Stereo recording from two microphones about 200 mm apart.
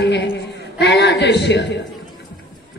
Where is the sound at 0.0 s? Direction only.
60° left (ahead or behind).